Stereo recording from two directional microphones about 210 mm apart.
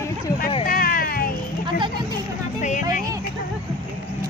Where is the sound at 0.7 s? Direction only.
45° left (ahead or behind).